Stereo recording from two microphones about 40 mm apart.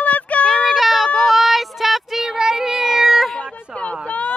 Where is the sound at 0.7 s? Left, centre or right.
Centre.